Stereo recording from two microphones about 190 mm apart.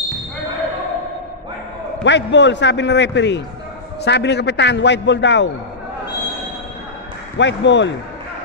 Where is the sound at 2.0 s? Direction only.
70° left (ahead or behind).